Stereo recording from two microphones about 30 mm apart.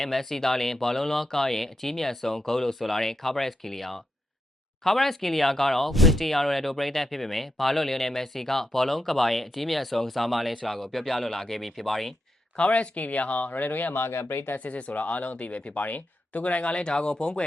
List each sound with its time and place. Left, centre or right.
0.0 s speech: centre
11.6 s speech: centre
12.5 s speech: left
13.5 s speech: left
14.7 s speech: left
16.4 s speech: left
16.7 s speech: left